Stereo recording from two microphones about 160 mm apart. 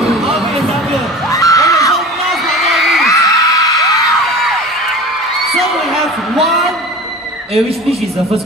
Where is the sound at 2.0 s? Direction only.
Centre (ahead or behind).